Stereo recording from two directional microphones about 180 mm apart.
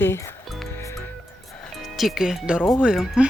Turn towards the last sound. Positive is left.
turn(degrees=0)  # may be behind; listen again after turning